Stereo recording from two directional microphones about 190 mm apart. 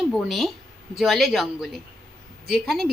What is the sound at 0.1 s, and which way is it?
A woman's voice, centre (ahead or behind).